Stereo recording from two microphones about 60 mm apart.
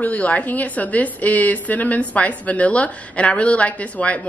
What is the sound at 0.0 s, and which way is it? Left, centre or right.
A woman's voice, left.